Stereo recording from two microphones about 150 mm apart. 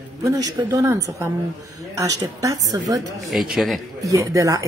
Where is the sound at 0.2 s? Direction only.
25° right (ahead or behind).